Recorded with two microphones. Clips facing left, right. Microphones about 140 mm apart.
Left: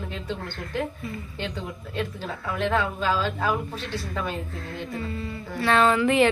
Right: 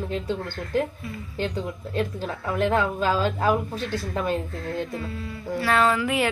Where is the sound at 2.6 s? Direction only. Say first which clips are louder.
Right 3 dB; 45° right (ahead or behind).